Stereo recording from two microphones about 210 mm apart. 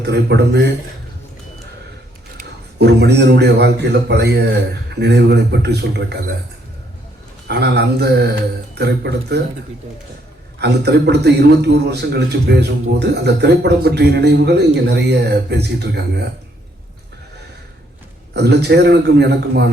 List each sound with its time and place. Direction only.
0.0 s a man's voice: 50° right (ahead or behind)
2.4 s a man's voice: 50° right (ahead or behind)
7.4 s a man's voice: 50° right (ahead or behind)
10.6 s a man's voice: 50° right (ahead or behind)
18.3 s a man's voice: 50° right (ahead or behind)